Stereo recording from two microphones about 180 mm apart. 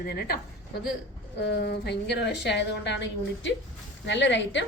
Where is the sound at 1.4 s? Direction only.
60° left (ahead or behind).